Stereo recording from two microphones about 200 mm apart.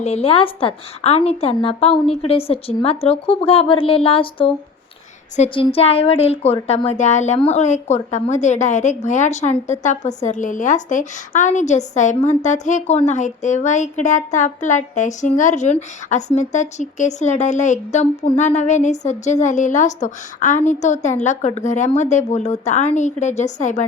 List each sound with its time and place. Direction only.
0.0 s a woman's voice: 30° left (ahead or behind)